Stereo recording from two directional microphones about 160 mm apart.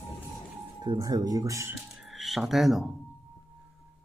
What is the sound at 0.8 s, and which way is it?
Speech, 25° right (ahead or behind).